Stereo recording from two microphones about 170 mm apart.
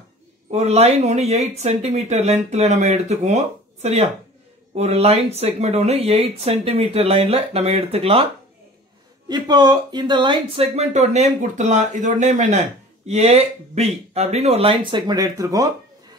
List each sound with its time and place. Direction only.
0.5 s speech: 40° right (ahead or behind)
9.3 s speech: 25° right (ahead or behind)